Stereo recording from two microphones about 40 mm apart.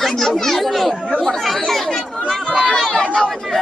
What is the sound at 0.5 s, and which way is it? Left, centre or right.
Children playing, centre.